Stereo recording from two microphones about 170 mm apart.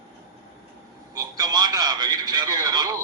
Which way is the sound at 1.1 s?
20° right (ahead or behind).